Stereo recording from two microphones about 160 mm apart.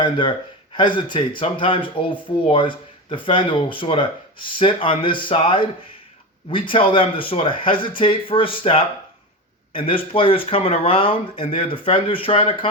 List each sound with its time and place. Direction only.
0.0 s speech: 30° left (ahead or behind)